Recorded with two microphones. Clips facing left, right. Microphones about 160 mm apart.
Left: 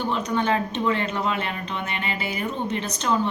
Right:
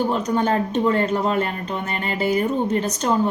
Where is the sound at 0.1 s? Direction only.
40° right (ahead or behind).